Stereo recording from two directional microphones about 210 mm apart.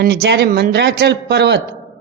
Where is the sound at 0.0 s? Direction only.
50° right (ahead or behind).